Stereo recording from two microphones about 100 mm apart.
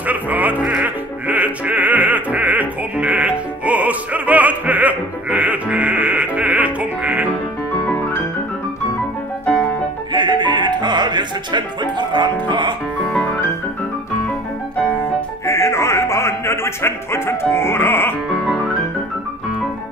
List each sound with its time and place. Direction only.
0.0 s music: 15° right (ahead or behind)
10.1 s music: 50° right (ahead or behind)
15.4 s music: 30° left (ahead or behind)